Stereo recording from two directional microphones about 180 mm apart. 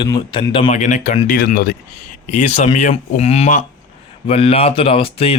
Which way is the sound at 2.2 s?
40° left (ahead or behind).